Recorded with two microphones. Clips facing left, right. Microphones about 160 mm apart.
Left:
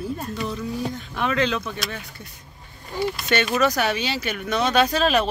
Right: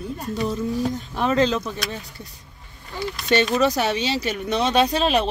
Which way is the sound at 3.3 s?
30° right (ahead or behind).